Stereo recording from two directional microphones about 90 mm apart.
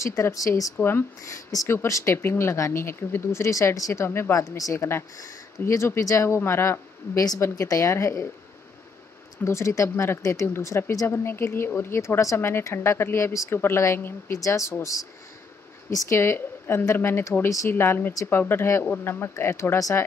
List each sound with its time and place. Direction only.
0.0 s speech: 35° left (ahead or behind)
0.7 s speech: 25° left (ahead or behind)
9.4 s speech: 30° left (ahead or behind)
16.2 s speech: 25° left (ahead or behind)